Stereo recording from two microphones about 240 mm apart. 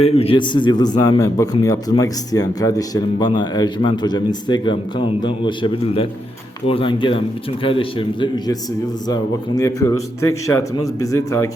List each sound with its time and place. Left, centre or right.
0.0 s a man's voice: left
9.6 s a man's voice: centre